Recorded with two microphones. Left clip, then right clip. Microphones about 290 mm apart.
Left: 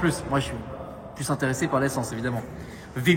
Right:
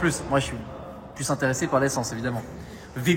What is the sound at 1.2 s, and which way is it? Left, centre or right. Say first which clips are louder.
Speech: right 1 dB; centre.